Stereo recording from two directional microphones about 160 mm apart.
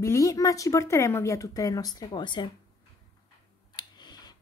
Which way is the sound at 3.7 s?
25° left (ahead or behind).